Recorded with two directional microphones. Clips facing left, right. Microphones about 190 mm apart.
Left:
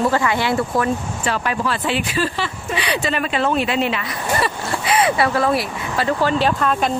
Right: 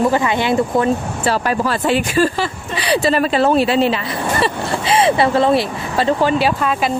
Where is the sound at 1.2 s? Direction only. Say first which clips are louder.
Right 5 dB; 40° right (ahead or behind).